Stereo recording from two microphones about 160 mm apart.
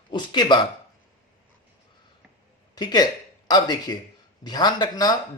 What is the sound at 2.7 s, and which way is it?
Speech, 25° left (ahead or behind).